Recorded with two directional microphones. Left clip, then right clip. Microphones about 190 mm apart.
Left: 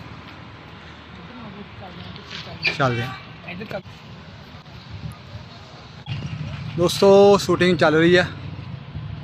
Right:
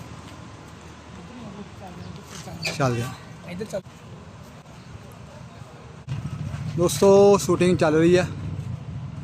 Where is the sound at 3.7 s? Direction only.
65° right (ahead or behind).